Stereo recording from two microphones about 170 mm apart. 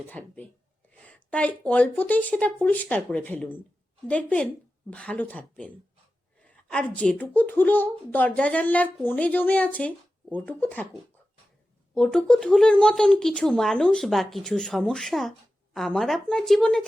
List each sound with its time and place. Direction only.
0.1 s speech: 10° left (ahead or behind)
11.9 s speech: 5° left (ahead or behind)